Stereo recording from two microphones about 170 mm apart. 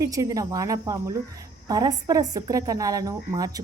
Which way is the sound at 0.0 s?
20° right (ahead or behind).